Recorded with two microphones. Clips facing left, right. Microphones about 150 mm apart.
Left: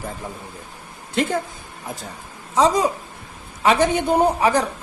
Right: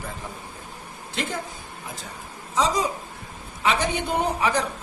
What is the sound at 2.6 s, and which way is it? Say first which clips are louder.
A man's voice: left 6 dB; 55° left (ahead or behind).